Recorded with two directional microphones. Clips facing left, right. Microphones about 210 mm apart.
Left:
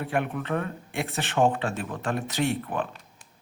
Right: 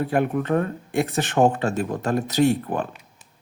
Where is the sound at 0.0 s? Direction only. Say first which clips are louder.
Right 6 dB; 40° right (ahead or behind).